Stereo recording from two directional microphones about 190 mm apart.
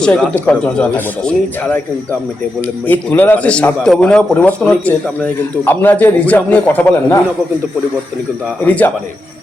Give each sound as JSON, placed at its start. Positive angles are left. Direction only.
{"t": 0.0, "sound": "a man's voice", "side_deg": 5}
{"t": 8.6, "sound": "a man's voice", "side_deg": 10}